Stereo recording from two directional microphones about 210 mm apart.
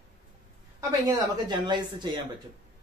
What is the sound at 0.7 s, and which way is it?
A woman's voice, 20° right (ahead or behind).